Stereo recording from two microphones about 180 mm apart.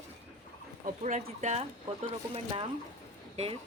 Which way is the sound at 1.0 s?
40° right (ahead or behind).